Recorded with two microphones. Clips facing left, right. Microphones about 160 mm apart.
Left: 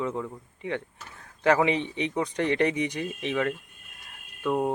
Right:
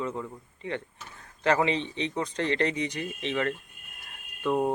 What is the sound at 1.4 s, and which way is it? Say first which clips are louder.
Speech: left 2 dB; 15° left (ahead or behind).